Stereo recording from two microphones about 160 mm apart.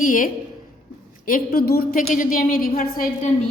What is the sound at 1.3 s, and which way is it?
A woman's voice, 70° left (ahead or behind).